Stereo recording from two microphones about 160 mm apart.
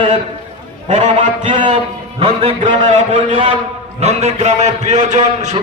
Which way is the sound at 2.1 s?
35° right (ahead or behind).